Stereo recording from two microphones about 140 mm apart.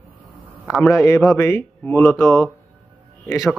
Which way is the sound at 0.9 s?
20° left (ahead or behind).